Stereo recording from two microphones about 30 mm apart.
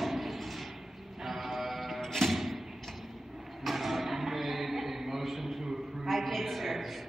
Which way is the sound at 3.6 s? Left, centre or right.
Centre.